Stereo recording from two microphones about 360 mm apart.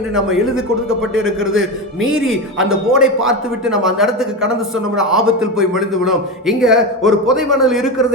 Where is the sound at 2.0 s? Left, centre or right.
Centre.